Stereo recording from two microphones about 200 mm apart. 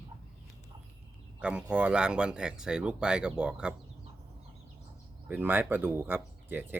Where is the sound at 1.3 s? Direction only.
5° right (ahead or behind).